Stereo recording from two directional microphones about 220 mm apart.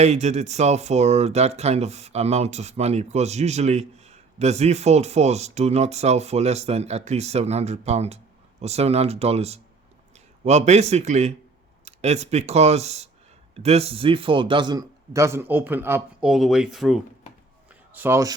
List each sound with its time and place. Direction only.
0.0 s a man's voice: 30° right (ahead or behind); by 18.3 s 15° right (ahead or behind)